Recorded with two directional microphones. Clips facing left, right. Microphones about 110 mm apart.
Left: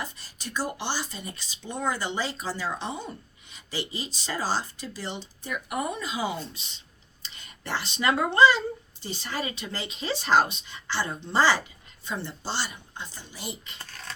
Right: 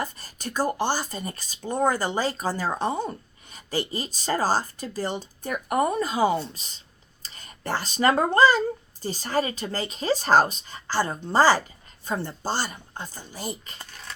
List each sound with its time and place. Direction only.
0.0 s speech: 50° right (ahead or behind)